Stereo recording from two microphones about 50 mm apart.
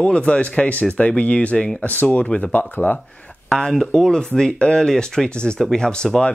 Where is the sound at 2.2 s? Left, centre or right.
Centre.